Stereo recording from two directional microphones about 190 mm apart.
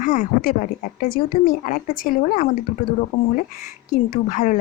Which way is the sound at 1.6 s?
45° left (ahead or behind).